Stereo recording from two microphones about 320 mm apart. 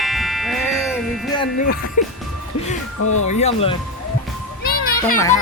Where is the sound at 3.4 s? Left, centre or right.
Centre.